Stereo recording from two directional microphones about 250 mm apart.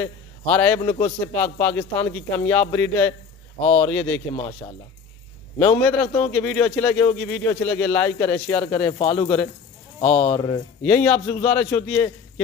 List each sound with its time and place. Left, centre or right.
0.0 s a man's voice: centre
3.6 s speech: left
3.9 s a man's voice: centre; by 10.6 s left
10.8 s speech: centre